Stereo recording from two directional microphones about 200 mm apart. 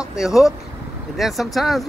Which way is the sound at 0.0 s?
5° right (ahead or behind).